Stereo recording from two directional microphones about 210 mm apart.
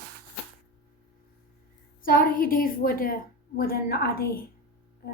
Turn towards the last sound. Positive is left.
turn(degrees=45)  # may be behind; listen again after turning